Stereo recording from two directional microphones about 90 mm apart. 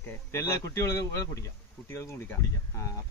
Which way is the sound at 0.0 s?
25° left (ahead or behind).